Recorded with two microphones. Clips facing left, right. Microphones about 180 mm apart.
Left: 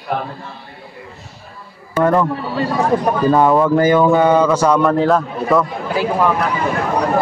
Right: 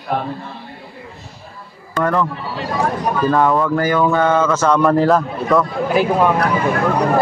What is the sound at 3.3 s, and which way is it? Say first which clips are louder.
Speech: left 4 dB; 20° left (ahead or behind).